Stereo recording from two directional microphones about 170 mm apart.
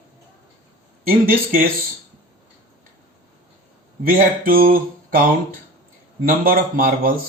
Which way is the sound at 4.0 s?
60° right (ahead or behind).